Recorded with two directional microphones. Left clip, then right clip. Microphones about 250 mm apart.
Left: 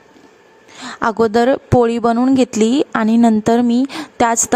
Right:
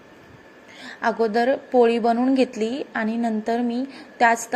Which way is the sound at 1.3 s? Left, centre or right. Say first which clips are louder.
Left 7 dB; left.